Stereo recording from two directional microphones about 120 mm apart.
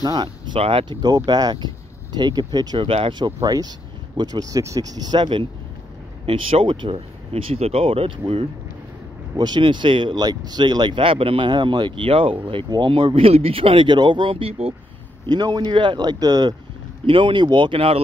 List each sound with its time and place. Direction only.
0.0 s speech: 35° right (ahead or behind)
0.6 s speech: 50° right (ahead or behind)
1.0 s speech: 35° right (ahead or behind)
2.9 s speech: 50° right (ahead or behind)
3.3 s speech: 30° right (ahead or behind)
5.2 s speech: 45° right (ahead or behind)
9.4 s speech: 40° right (ahead or behind)
15.2 s speech: 35° right (ahead or behind)
17.0 s speech: 45° right (ahead or behind)